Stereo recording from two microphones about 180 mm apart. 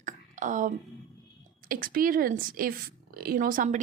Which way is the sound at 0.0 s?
45° right (ahead or behind).